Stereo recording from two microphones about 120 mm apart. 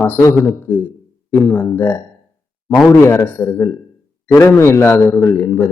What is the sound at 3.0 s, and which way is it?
Speech, 20° left (ahead or behind).